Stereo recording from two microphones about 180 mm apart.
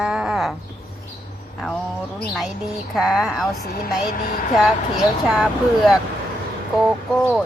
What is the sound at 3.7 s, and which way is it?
Speech, 50° left (ahead or behind).